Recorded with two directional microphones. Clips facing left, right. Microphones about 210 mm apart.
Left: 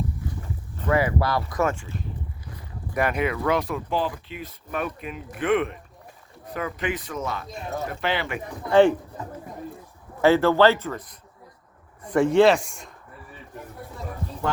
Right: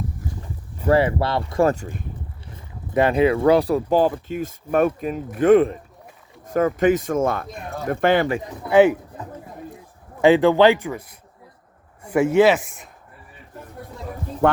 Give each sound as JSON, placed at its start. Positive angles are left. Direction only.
{"t": 0.9, "sound": "speech", "side_deg": -30}
{"t": 2.6, "sound": "speech", "side_deg": -25}
{"t": 8.6, "sound": "speech", "side_deg": -5}
{"t": 10.2, "sound": "speech", "side_deg": -15}
{"t": 12.0, "sound": "speech", "side_deg": -5}
{"t": 14.4, "sound": "speech", "side_deg": -60}